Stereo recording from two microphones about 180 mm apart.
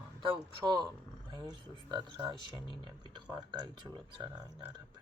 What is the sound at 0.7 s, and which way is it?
Speech, 25° right (ahead or behind).